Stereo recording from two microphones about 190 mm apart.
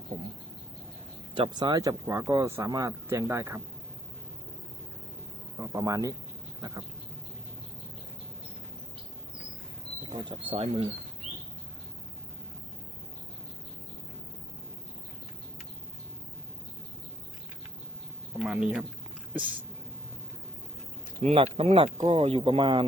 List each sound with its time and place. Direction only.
0.1 s speech: 35° right (ahead or behind)
1.4 s speech: 20° right (ahead or behind)
5.5 s speech: 15° right (ahead or behind)
10.0 s speech: 25° right (ahead or behind)
18.3 s speech: 5° right (ahead or behind)
21.2 s speech: 35° right (ahead or behind)